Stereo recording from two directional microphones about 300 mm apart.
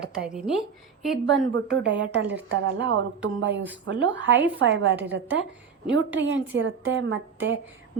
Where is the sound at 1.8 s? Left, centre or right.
Right.